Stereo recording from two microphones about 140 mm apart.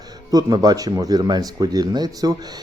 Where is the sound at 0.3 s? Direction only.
25° right (ahead or behind).